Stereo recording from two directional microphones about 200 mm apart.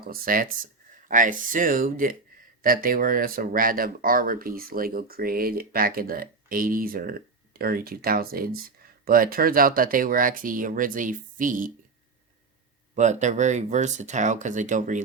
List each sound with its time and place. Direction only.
0.0 s speech: 45° right (ahead or behind)
13.0 s speech: 35° right (ahead or behind)